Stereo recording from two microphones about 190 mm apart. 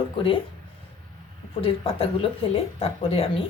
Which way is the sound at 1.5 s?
30° left (ahead or behind).